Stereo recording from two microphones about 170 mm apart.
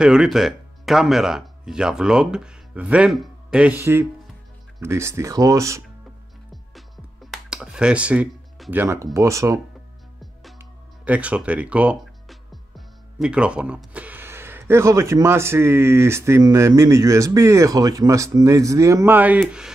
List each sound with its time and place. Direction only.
0.0 s speech: 5° right (ahead or behind)
7.2 s speech: 5° right (ahead or behind)
10.6 s speech: 10° right (ahead or behind)